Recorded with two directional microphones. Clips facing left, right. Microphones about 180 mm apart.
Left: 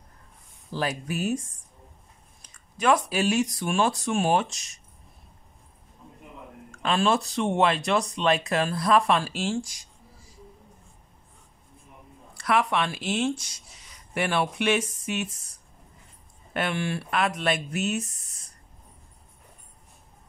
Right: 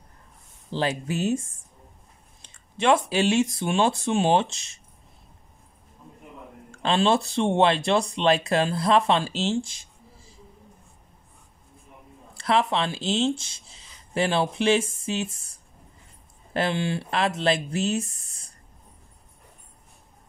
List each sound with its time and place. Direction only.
0.7 s speech: 25° right (ahead or behind)
6.7 s speech: 30° right (ahead or behind)
12.4 s speech: 25° right (ahead or behind)